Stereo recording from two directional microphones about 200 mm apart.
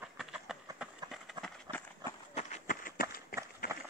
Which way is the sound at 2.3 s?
35° left (ahead or behind).